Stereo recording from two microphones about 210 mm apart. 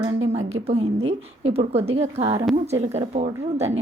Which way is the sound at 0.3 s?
30° right (ahead or behind).